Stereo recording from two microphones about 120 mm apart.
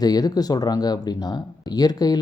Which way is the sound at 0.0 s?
35° left (ahead or behind).